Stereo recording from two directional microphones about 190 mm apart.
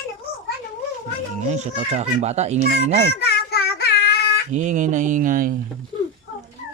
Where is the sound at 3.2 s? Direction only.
60° left (ahead or behind).